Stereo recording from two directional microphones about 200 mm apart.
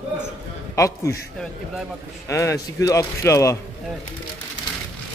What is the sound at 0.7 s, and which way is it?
Speech, 15° left (ahead or behind).